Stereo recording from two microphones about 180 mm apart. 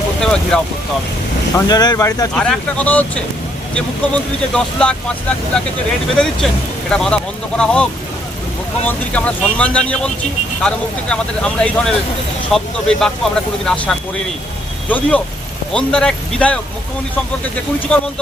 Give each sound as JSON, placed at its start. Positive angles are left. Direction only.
{"t": 0.2, "sound": "vehicle", "side_deg": 5}
{"t": 1.5, "sound": "speech", "side_deg": 20}
{"t": 2.3, "sound": "speech", "side_deg": 5}
{"t": 6.9, "sound": "speech", "side_deg": 5}
{"t": 8.9, "sound": "speech", "side_deg": 5}
{"t": 17.9, "sound": "speech", "side_deg": 5}